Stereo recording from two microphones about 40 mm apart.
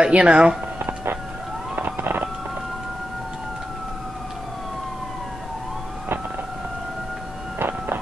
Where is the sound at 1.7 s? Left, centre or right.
Right.